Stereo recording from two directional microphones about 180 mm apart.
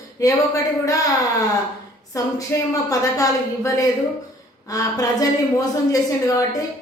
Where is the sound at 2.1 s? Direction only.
20° left (ahead or behind).